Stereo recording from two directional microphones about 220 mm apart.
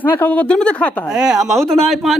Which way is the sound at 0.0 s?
10° left (ahead or behind).